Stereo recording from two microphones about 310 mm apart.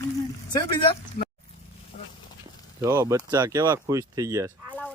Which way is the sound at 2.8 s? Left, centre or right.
Centre.